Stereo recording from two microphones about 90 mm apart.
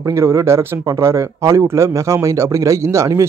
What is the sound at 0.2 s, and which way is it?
Speech, 30° right (ahead or behind).